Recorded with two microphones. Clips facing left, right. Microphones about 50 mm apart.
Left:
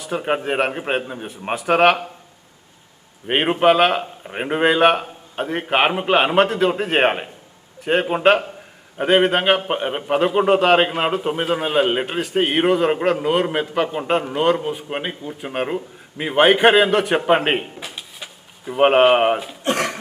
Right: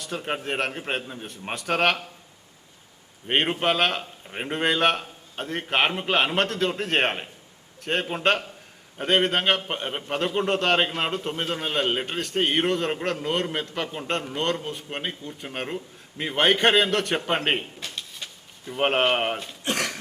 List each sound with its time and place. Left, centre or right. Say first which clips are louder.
0.2 s cough: left 9 dB; left
0.4 s a man's voice: left 7 dB; centre
3.2 s a man's voice: left 7 dB; centre
19.6 s cough: left 6 dB; left